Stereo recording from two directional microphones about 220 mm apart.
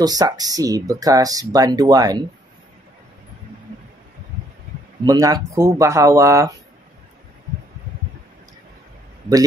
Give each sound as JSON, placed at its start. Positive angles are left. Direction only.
{"t": 0.0, "sound": "speech", "side_deg": -15}
{"t": 5.0, "sound": "speech", "side_deg": -15}